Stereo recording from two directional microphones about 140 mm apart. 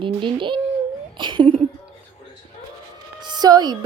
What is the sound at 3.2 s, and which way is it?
Speech, 30° right (ahead or behind).